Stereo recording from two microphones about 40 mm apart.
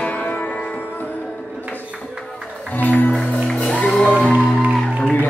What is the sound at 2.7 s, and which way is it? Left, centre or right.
Music, left.